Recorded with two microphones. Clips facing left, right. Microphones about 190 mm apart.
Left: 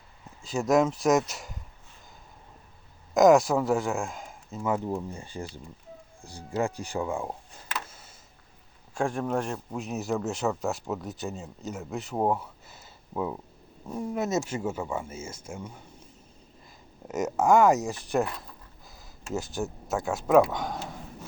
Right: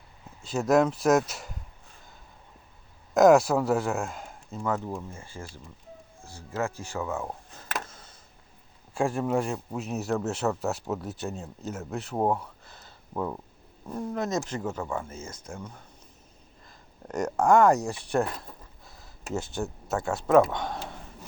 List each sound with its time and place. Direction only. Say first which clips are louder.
0.4 s speech: right 1 dB; centre (ahead or behind)
3.2 s speech: right 1 dB; centre (ahead or behind)
7.9 s a sound: right 1 dB; 10° left (ahead or behind)
9.0 s speech: right 2 dB; 5° right (ahead or behind)
17.1 s speech: even; 5° left (ahead or behind)